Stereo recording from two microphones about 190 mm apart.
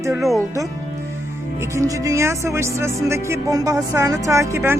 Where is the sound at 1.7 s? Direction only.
15° right (ahead or behind).